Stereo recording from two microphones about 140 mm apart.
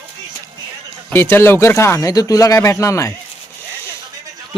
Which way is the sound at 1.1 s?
15° left (ahead or behind).